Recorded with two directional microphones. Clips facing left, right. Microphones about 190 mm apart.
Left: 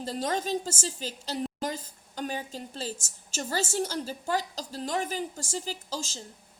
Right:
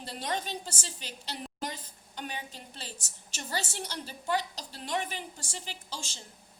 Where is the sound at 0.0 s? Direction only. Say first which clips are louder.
Left 5 dB; 40° left (ahead or behind).